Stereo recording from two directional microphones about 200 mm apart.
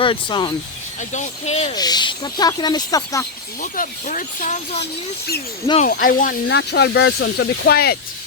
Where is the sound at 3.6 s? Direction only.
40° left (ahead or behind).